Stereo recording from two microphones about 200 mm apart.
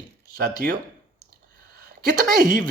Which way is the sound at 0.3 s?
45° right (ahead or behind).